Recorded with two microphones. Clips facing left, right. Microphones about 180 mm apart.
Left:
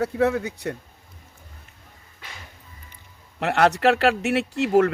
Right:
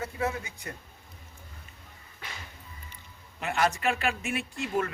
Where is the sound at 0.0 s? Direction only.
70° left (ahead or behind).